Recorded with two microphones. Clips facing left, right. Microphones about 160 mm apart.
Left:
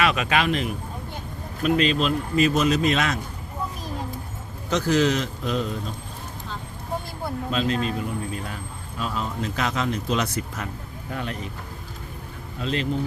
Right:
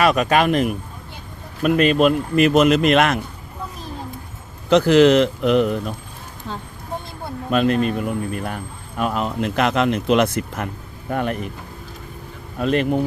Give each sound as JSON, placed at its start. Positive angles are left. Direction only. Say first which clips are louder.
{"t": 0.0, "sound": "a man's voice", "louder": "right 6 dB", "side_deg": -45}
{"t": 4.7, "sound": "a man's voice", "louder": "right 9 dB", "side_deg": -60}
{"t": 7.5, "sound": "a man's voice", "louder": "right 8 dB", "side_deg": -60}
{"t": 12.5, "sound": "a man's voice", "louder": "right 7 dB", "side_deg": -60}